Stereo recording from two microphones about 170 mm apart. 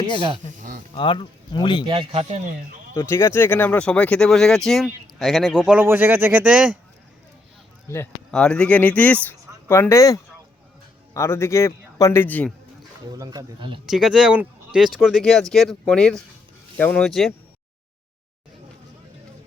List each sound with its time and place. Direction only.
0.1 s speech: 25° left (ahead or behind)
0.5 s a sound: 50° right (ahead or behind)
0.9 s speech: 30° left (ahead or behind)
1.9 s speech: 30° right (ahead or behind)
2.9 s speech: 15° left (ahead or behind); by 6.7 s 5° right (ahead or behind)
8.3 s a man's voice: 5° left (ahead or behind)
13.1 s speech: 20° right (ahead or behind)
13.8 s speech: 5° right (ahead or behind)